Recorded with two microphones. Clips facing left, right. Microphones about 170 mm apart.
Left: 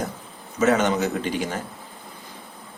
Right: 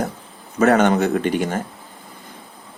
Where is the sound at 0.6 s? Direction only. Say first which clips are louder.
Right 5 dB; 60° right (ahead or behind).